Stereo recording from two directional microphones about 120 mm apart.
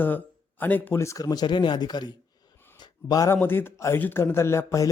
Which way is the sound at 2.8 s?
35° left (ahead or behind).